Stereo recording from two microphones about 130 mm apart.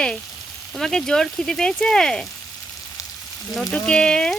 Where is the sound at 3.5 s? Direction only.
5° left (ahead or behind).